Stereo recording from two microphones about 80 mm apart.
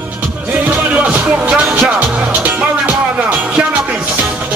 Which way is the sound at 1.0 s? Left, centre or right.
Centre.